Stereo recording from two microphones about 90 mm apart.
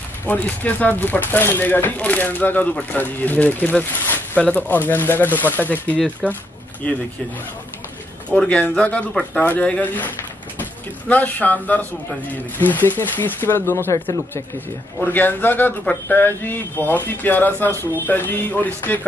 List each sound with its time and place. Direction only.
0.3 s a man's voice: 20° left (ahead or behind)
6.2 s speech: 5° left (ahead or behind)
6.8 s speech: 15° left (ahead or behind)
8.3 s a man's voice: 10° left (ahead or behind)